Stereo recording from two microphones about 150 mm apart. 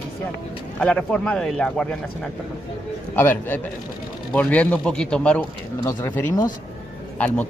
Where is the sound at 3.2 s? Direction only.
15° left (ahead or behind).